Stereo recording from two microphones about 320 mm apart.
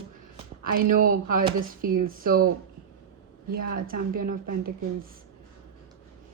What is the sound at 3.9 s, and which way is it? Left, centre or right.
Speech, right.